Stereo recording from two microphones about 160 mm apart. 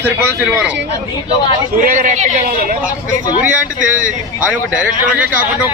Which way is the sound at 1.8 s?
50° right (ahead or behind).